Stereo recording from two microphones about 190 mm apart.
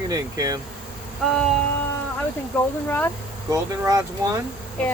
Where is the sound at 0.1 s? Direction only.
20° right (ahead or behind).